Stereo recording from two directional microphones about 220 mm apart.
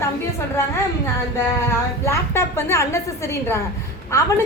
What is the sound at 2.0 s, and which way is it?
A woman's voice, 10° left (ahead or behind).